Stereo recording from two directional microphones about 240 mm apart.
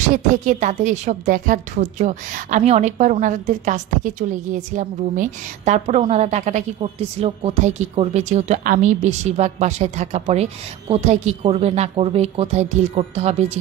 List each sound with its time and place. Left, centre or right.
0.1 s a woman's voice: right